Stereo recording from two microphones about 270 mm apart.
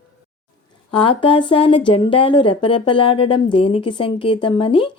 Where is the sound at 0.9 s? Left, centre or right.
Centre.